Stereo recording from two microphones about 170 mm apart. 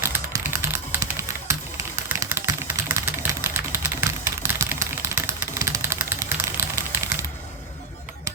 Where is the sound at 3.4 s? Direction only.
10° right (ahead or behind).